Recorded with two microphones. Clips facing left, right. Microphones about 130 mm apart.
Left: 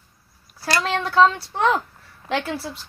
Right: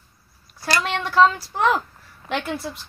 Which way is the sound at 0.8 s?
30° left (ahead or behind).